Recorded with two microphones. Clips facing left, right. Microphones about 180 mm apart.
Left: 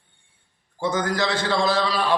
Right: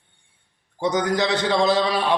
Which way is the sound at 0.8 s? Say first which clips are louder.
Right 2 dB; 20° right (ahead or behind).